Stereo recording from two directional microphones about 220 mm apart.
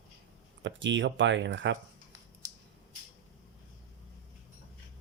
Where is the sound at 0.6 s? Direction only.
55° right (ahead or behind).